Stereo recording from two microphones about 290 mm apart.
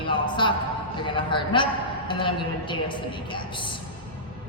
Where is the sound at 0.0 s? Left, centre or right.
Centre.